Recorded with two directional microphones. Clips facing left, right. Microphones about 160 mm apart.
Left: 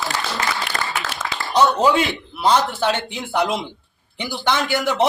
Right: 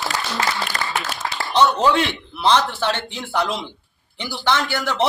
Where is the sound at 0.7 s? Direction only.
30° left (ahead or behind).